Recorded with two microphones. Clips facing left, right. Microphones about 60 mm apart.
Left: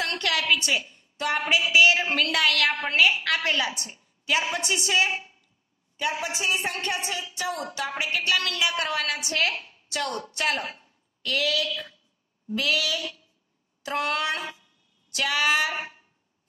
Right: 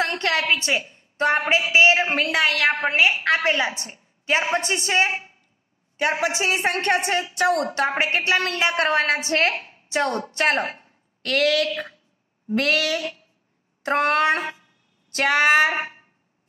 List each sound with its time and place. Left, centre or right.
0.0 s a woman's voice: right
6.2 s a woman's voice: right
12.4 s a sound: right
13.8 s speech: right